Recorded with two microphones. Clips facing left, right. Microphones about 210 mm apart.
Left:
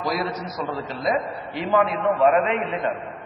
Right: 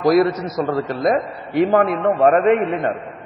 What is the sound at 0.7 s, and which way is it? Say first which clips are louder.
A man's voice: right 6 dB; 55° right (ahead or behind).